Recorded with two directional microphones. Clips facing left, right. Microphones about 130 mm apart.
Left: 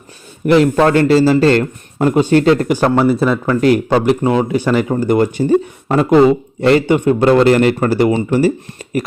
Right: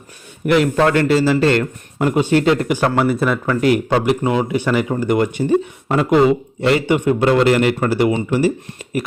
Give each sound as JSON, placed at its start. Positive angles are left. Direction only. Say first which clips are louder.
{"t": 0.4, "sound": "a man's voice", "louder": "left 4 dB", "side_deg": 30}